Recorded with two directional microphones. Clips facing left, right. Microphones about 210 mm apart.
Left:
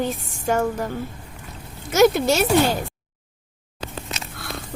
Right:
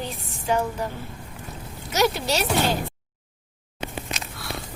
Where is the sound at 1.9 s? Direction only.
50° left (ahead or behind).